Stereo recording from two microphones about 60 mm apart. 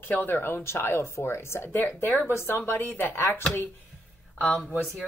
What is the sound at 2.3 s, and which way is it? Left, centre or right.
Speech, left.